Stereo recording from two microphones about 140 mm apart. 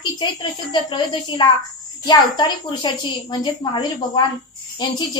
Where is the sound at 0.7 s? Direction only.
35° left (ahead or behind).